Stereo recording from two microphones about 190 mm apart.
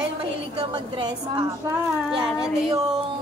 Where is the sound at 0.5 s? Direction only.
25° right (ahead or behind).